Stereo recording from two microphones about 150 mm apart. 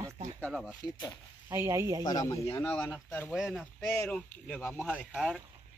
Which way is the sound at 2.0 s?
20° left (ahead or behind).